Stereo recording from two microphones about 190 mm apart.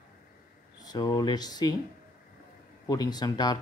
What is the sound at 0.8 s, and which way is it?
Speech, 20° left (ahead or behind).